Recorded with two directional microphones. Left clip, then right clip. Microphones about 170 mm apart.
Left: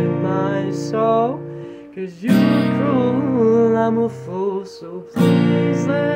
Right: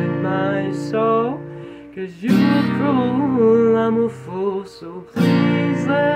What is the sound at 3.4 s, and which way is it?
Music, 10° left (ahead or behind).